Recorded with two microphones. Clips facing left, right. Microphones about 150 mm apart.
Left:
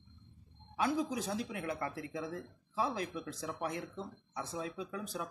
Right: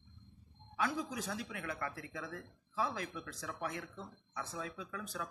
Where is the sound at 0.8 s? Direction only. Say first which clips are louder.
Left 4 dB; 25° left (ahead or behind).